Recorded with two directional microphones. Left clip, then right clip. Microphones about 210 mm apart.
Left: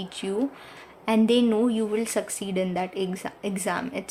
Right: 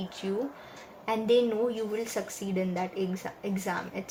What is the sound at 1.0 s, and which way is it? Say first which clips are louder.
A woman's voice: left 3 dB; 35° left (ahead or behind).